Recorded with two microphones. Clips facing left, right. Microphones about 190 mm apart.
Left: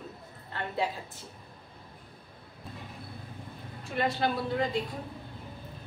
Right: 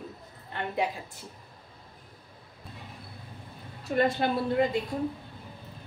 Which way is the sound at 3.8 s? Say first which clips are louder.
Right 4 dB; 50° right (ahead or behind).